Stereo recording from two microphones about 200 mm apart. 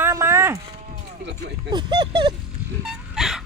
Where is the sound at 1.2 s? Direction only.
55° right (ahead or behind).